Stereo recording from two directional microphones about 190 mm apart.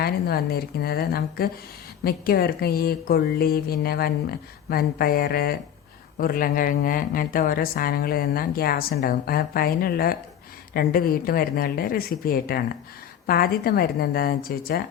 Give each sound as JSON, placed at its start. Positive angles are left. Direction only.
{"t": 0.0, "sound": "a woman's voice", "side_deg": 55}